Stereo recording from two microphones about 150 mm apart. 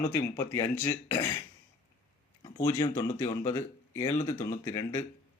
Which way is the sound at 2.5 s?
20° left (ahead or behind).